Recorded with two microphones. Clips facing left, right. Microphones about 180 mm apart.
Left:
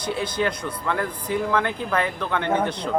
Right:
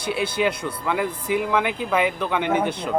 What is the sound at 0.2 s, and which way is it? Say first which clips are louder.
Speech: right 4 dB; 10° right (ahead or behind).